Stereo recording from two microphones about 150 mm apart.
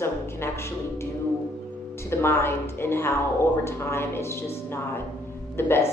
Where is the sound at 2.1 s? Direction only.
15° left (ahead or behind).